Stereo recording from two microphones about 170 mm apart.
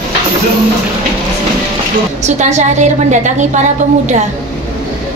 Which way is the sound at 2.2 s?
45° right (ahead or behind).